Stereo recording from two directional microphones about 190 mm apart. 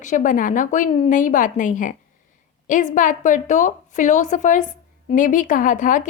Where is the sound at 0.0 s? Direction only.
40° left (ahead or behind).